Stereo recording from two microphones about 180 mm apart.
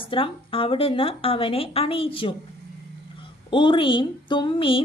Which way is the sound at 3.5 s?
25° left (ahead or behind).